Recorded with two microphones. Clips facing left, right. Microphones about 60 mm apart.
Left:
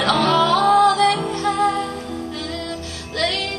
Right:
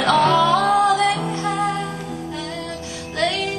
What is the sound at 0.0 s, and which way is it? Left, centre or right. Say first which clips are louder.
Music: right 1 dB; centre.